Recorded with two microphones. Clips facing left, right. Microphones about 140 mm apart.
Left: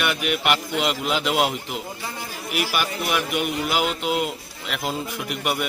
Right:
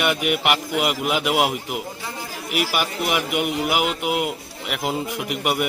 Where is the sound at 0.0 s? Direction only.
15° right (ahead or behind).